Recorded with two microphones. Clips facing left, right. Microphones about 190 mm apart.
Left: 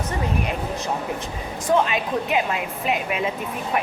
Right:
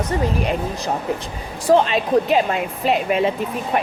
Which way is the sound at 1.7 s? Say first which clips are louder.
Right 5 dB; 35° right (ahead or behind).